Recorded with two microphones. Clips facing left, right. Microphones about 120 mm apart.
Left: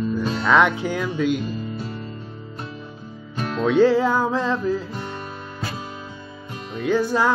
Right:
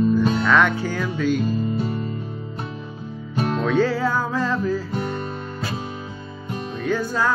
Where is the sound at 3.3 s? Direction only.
35° right (ahead or behind).